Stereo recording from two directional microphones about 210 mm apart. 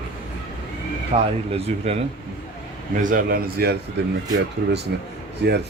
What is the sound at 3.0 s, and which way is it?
Speech, 40° right (ahead or behind).